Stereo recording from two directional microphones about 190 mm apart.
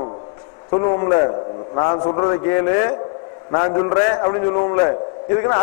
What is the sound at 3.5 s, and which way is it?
A man's voice, 25° left (ahead or behind).